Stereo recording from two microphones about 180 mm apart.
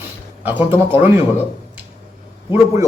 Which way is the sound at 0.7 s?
10° right (ahead or behind).